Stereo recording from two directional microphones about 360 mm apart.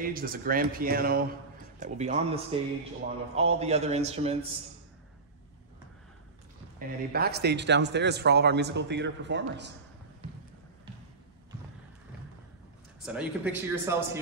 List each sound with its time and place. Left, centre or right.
0.0 s a man's voice: right
7.1 s speech: right
13.0 s speech: centre